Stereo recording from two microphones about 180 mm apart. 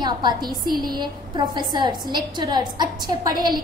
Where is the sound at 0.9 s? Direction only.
25° right (ahead or behind).